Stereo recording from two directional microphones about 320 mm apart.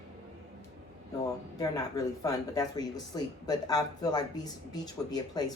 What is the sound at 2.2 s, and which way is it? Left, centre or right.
Speech, centre.